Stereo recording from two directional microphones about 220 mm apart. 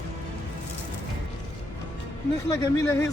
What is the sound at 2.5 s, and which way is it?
Speech, 15° left (ahead or behind).